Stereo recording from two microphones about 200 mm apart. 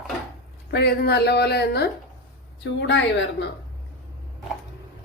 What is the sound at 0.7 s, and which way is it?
A woman's voice, 55° left (ahead or behind).